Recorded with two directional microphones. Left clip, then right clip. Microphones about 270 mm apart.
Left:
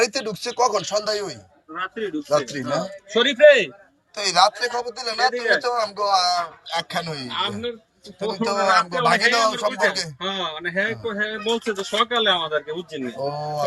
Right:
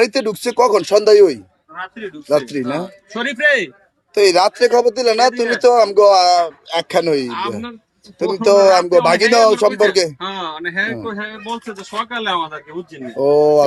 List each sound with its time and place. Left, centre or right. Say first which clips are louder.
0.0 s a man's voice: right 7 dB; right
12.1 s a man's voice: right 2 dB; centre